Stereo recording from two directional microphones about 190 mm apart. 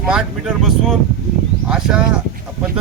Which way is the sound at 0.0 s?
5° right (ahead or behind).